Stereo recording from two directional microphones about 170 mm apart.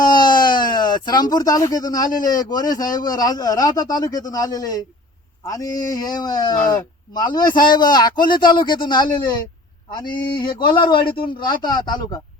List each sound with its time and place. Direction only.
0.0 s a man's voice: 25° left (ahead or behind)